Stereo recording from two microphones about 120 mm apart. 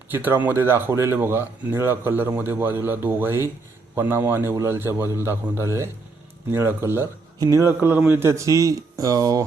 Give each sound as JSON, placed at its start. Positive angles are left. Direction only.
{"t": 0.1, "sound": "a man's voice", "side_deg": -15}